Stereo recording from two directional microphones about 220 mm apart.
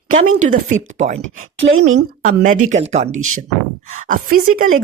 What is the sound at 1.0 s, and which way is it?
Speech, 35° right (ahead or behind).